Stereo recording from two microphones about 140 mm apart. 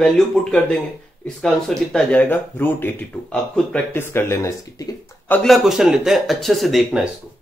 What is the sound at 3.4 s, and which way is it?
Speech, 5° left (ahead or behind).